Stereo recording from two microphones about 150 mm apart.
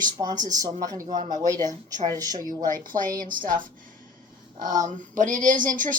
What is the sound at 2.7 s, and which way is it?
Speech, 65° right (ahead or behind).